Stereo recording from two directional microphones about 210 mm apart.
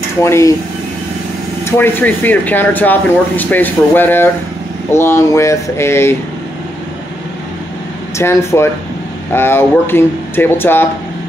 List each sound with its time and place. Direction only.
0.2 s speech: 15° left (ahead or behind)
1.8 s speech: 10° left (ahead or behind)
8.2 s speech: 15° left (ahead or behind)